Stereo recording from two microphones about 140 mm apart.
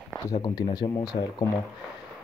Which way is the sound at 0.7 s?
30° left (ahead or behind).